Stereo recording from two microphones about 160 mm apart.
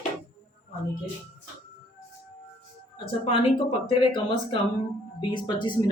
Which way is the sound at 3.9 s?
30° left (ahead or behind).